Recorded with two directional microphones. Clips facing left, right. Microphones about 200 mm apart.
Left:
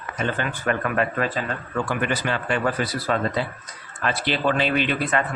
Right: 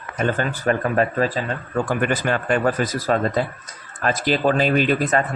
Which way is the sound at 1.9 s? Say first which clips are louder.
Right 4 dB; 50° right (ahead or behind).